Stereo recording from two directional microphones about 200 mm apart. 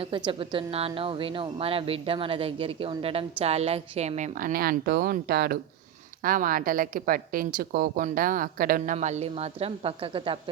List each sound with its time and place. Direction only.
0.3 s a woman's voice: 25° right (ahead or behind)